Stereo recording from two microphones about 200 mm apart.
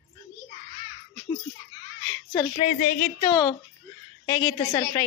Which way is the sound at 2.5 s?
35° left (ahead or behind).